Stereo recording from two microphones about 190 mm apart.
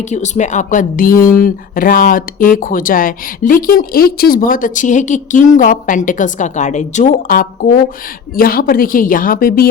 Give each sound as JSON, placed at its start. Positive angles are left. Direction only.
{"t": 0.0, "sound": "speech", "side_deg": 40}